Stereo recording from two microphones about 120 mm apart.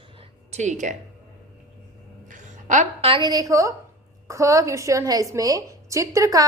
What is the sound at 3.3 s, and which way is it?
A woman's voice, 30° right (ahead or behind).